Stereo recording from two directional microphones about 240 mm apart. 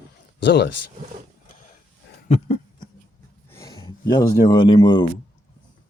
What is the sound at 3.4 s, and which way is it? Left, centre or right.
Speech, centre.